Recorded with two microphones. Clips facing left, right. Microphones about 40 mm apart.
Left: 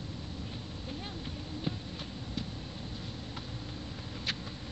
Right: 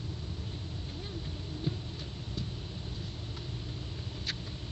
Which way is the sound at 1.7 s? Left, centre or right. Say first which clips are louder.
Right 1 dB; left.